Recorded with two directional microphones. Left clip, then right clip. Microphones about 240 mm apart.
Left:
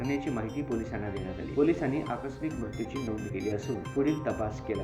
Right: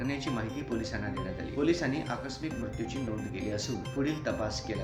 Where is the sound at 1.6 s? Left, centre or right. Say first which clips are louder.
Left 3 dB; centre.